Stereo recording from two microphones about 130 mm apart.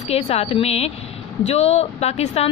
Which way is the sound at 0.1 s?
50° left (ahead or behind).